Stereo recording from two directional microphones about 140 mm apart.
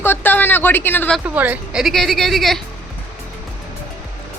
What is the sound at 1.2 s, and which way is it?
Speech, 10° right (ahead or behind).